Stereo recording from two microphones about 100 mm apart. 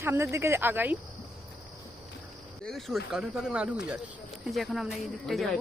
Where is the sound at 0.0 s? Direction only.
25° right (ahead or behind).